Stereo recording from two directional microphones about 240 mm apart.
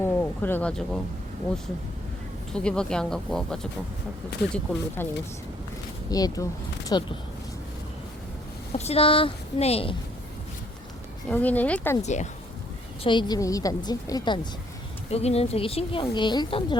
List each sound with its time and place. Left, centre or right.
0.0 s a sound: centre
2.5 s speech: centre
5.0 s a woman's voice: centre
8.7 s speech: left
11.3 s a woman's voice: centre
12.0 s a woman's voice: left